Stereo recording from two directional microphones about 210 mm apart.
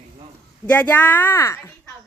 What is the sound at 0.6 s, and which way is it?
Speech, 5° left (ahead or behind).